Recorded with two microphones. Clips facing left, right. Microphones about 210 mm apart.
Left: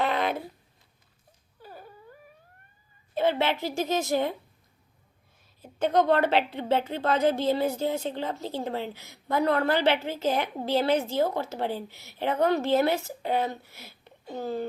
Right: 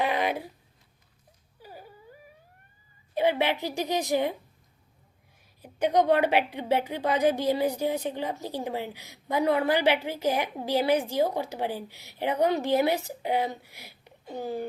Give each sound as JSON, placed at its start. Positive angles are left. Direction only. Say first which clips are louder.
{"t": 0.0, "sound": "a sound", "louder": "even", "side_deg": -15}
{"t": 1.6, "sound": "whimper", "louder": "even", "side_deg": -10}
{"t": 3.2, "sound": "a woman's voice", "louder": "even", "side_deg": -15}
{"t": 5.6, "sound": "a woman's voice", "louder": "even", "side_deg": -15}